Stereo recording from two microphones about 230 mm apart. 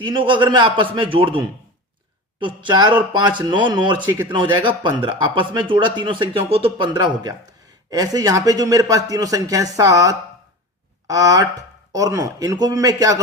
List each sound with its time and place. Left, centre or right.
0.0 s speech: right